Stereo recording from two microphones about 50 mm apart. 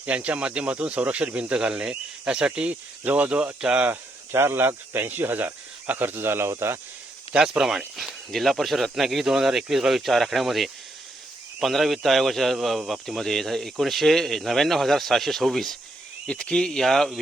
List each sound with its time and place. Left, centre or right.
0.0 s speech: right
4.3 s speech: right
7.3 s speech: centre
7.9 s speech: centre
16.2 s speech: centre